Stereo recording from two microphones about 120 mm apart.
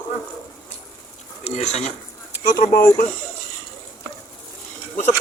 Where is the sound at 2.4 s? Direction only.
90° left.